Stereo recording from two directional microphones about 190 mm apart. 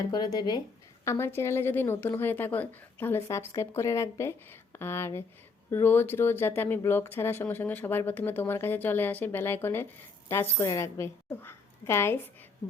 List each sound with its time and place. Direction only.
0.1 s speech: 20° left (ahead or behind)